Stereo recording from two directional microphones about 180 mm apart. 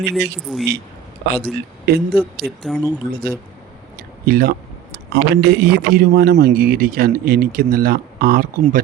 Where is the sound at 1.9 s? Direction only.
60° right (ahead or behind).